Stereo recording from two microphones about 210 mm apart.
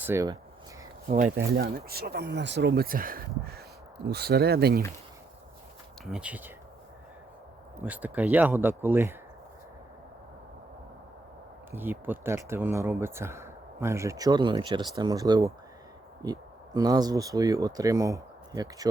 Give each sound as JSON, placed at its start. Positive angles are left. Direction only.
{"t": 0.0, "sound": "speech", "side_deg": -15}
{"t": 1.5, "sound": "speech", "side_deg": -45}
{"t": 6.1, "sound": "speech", "side_deg": -5}
{"t": 7.8, "sound": "speech", "side_deg": -5}
{"t": 11.7, "sound": "speech", "side_deg": -10}